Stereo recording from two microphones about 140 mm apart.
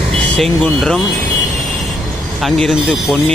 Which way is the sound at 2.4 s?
Centre (ahead or behind).